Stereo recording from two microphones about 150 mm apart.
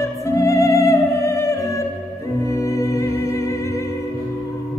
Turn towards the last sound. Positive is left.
turn(degrees=20)  # may be behind; listen again after turning